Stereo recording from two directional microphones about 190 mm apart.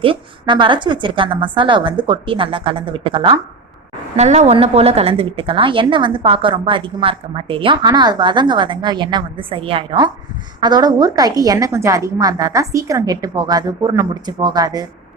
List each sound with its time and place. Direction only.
0.0 s a woman's voice: 25° right (ahead or behind)